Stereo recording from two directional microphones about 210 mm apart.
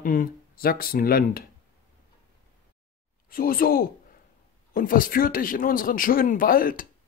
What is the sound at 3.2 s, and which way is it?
Speech, 45° left (ahead or behind).